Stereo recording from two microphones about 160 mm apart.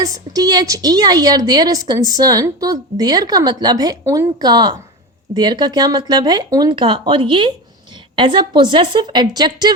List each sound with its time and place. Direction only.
0.0 s a woman's voice: 25° right (ahead or behind)